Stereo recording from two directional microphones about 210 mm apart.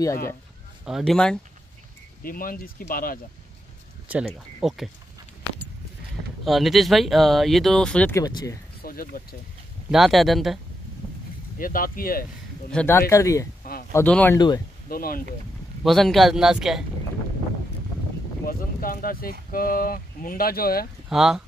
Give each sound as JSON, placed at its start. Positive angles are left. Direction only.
{"t": 0.8, "sound": "speech", "side_deg": 0}
{"t": 2.2, "sound": "speech", "side_deg": 45}
{"t": 4.1, "sound": "speech", "side_deg": -5}
{"t": 6.4, "sound": "speech", "side_deg": 0}
{"t": 8.8, "sound": "speech", "side_deg": 45}
{"t": 9.8, "sound": "speech", "side_deg": 0}
{"t": 11.5, "sound": "speech", "side_deg": 40}
{"t": 12.7, "sound": "speech", "side_deg": 10}
{"t": 14.9, "sound": "speech", "side_deg": 45}
{"t": 15.8, "sound": "speech", "side_deg": 0}
{"t": 18.4, "sound": "speech", "side_deg": 45}
{"t": 21.1, "sound": "speech", "side_deg": 0}